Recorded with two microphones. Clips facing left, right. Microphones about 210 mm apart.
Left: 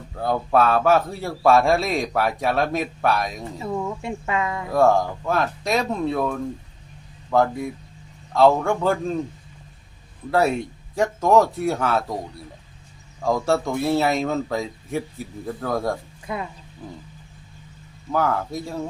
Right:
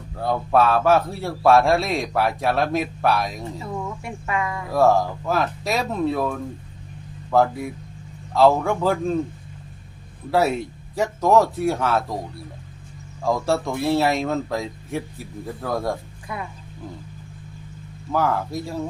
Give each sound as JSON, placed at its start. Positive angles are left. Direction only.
{"t": 0.2, "sound": "a man's voice", "side_deg": 0}
{"t": 3.6, "sound": "speech", "side_deg": 25}
{"t": 4.7, "sound": "a man's voice", "side_deg": 0}
{"t": 10.9, "sound": "a man's voice", "side_deg": 0}
{"t": 13.2, "sound": "a man's voice", "side_deg": 0}
{"t": 16.2, "sound": "speech", "side_deg": 25}
{"t": 18.1, "sound": "a man's voice", "side_deg": 0}